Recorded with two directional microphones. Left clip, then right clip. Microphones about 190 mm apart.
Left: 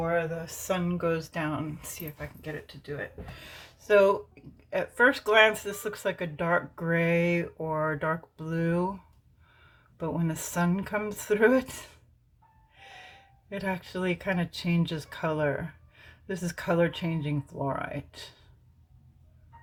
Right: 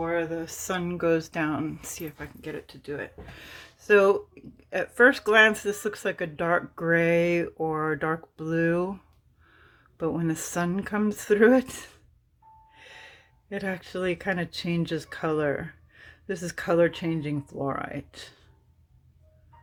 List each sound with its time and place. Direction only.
0.0 s speech: 45° right (ahead or behind)
10.0 s speech: 35° right (ahead or behind)